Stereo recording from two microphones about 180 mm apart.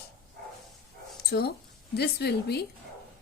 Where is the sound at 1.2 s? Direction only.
60° left (ahead or behind).